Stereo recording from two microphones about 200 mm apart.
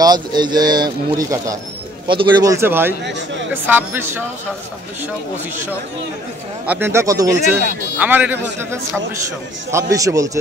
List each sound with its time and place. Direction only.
0.0 s speech: 20° right (ahead or behind)
6.6 s speech: 10° right (ahead or behind)